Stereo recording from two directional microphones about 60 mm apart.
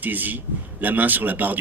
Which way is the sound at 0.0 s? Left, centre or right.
Right.